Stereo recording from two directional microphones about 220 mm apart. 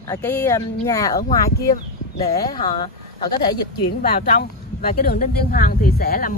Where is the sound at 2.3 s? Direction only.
20° left (ahead or behind).